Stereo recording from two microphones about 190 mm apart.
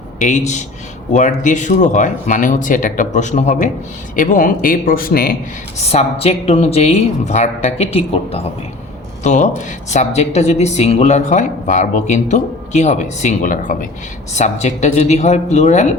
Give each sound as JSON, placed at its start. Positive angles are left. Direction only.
{"t": 0.2, "sound": "a man's voice", "side_deg": 40}
{"t": 5.9, "sound": "speech", "side_deg": 35}